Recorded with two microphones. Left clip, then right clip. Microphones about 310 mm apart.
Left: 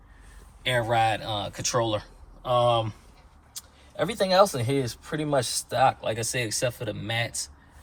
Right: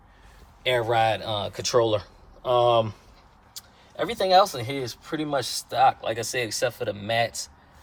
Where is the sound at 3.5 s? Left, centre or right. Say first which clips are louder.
Even; centre.